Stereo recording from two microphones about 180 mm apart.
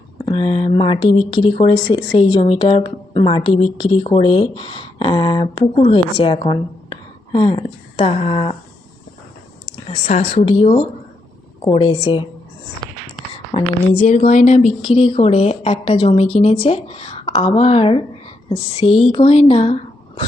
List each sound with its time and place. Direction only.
0.3 s a woman's voice: 30° left (ahead or behind)
9.9 s a woman's voice: 40° left (ahead or behind)
13.3 s a woman's voice: 30° left (ahead or behind)